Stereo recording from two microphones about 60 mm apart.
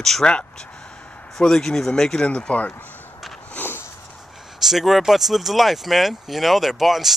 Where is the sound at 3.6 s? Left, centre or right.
Left.